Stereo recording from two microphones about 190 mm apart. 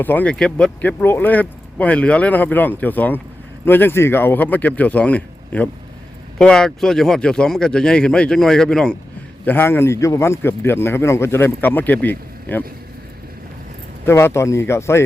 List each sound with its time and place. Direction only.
0.0 s a man's voice: 10° left (ahead or behind)
14.0 s a man's voice: 15° left (ahead or behind)